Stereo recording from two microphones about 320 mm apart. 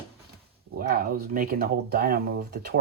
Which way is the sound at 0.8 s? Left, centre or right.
Right.